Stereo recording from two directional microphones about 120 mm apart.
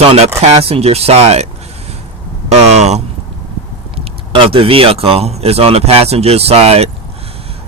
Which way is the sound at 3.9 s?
50° right (ahead or behind).